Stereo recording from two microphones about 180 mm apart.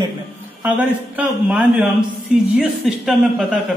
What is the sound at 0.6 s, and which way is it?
Speech, 10° right (ahead or behind).